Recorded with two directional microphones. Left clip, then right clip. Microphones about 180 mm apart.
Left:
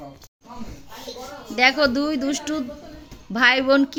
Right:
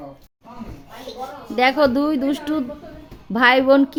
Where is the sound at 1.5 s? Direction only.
20° right (ahead or behind).